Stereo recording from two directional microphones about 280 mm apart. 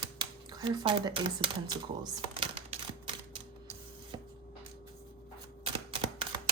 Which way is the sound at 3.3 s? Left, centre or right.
Centre.